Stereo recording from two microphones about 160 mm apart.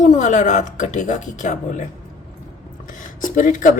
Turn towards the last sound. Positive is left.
turn(degrees=55)  # may be behind; listen again after turning